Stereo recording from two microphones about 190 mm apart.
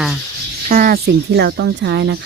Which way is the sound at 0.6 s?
50° right (ahead or behind).